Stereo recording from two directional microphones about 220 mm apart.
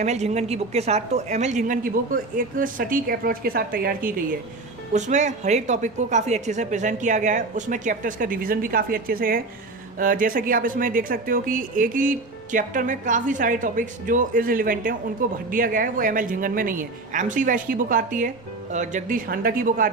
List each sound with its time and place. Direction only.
0.0 s speech: 30° right (ahead or behind)